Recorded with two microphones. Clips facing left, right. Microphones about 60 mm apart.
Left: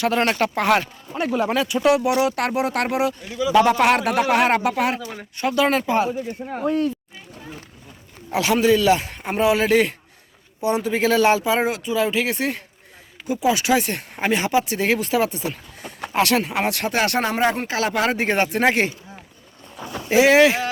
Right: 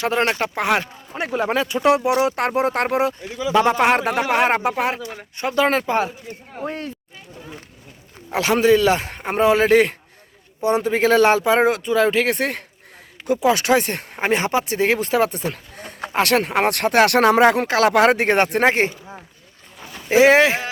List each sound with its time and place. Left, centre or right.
0.0 s speech: right
8.3 s a man's voice: right
18.6 s speech: right
20.1 s speech: right